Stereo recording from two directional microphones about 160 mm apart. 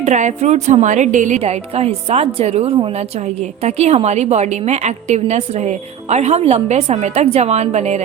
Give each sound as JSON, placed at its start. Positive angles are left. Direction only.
{"t": 0.0, "sound": "a woman's voice", "side_deg": -45}